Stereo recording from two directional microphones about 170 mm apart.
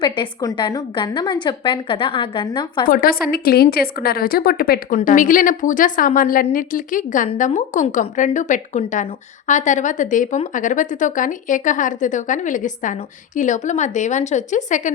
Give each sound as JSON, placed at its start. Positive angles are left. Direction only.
{"t": 0.0, "sound": "a woman's voice", "side_deg": 25}
{"t": 2.9, "sound": "a woman's voice", "side_deg": 60}